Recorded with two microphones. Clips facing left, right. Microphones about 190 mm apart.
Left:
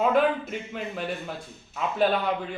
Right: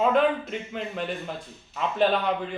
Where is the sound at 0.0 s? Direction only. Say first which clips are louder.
Even; 5° left (ahead or behind).